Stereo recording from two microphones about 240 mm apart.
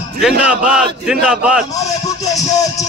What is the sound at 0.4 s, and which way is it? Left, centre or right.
A man's voice, centre.